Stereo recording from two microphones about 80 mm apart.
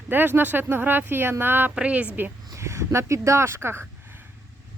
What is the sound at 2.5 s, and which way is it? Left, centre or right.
Speech, right.